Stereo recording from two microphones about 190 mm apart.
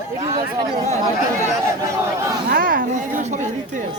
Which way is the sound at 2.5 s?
50° right (ahead or behind).